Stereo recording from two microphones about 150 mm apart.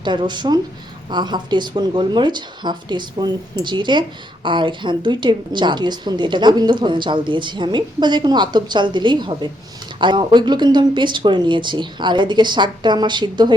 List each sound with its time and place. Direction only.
0.0 s a woman's voice: 30° right (ahead or behind)